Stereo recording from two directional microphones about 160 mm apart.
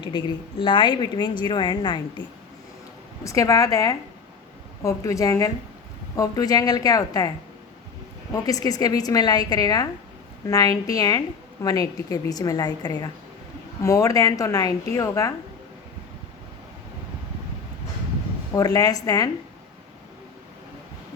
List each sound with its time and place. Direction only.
0.0 s a woman's voice: 30° left (ahead or behind)
3.2 s a woman's voice: 20° left (ahead or behind)
8.3 s a woman's voice: 20° left (ahead or behind)
18.5 s a woman's voice: 25° left (ahead or behind)